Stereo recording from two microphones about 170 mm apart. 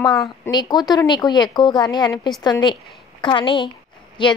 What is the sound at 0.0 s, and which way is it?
Speech, centre (ahead or behind).